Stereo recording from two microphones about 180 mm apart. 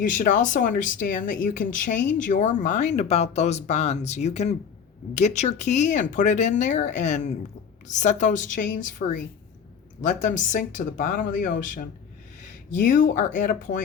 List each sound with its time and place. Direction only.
0.0 s speech: 45° left (ahead or behind)